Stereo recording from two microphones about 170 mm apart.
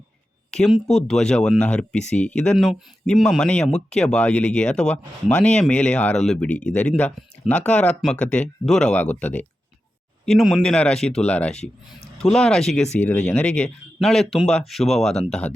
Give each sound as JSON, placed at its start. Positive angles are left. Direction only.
{"t": 0.5, "sound": "speech", "side_deg": 0}